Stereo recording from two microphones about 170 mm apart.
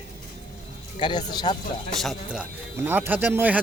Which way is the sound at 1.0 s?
25° left (ahead or behind).